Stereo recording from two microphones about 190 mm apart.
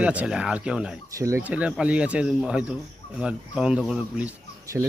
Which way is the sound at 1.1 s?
15° right (ahead or behind).